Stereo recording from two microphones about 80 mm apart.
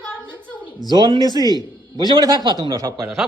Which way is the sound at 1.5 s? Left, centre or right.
Left.